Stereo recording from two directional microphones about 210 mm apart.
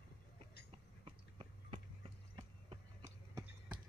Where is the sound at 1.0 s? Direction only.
30° right (ahead or behind).